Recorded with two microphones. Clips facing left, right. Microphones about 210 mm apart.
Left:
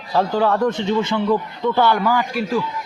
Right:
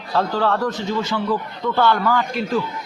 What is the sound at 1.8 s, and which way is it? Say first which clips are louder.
Speech: right 2 dB; 10° left (ahead or behind).